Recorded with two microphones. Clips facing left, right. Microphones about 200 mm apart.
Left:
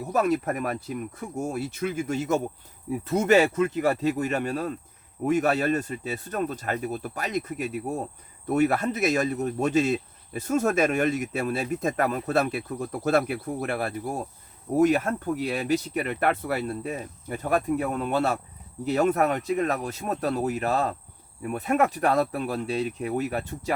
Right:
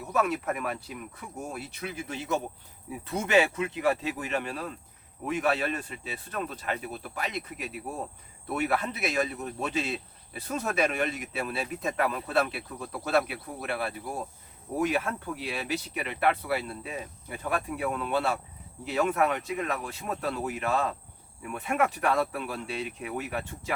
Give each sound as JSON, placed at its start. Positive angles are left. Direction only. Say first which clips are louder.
{"t": 0.0, "sound": "speech", "louder": "left 4 dB", "side_deg": 40}